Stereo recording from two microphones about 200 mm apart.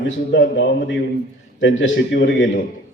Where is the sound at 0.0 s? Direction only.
60° left (ahead or behind).